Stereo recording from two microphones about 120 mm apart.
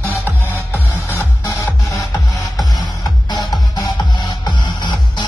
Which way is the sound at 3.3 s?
35° left (ahead or behind).